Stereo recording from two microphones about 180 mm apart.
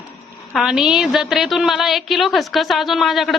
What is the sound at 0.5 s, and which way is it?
A woman's voice, centre (ahead or behind).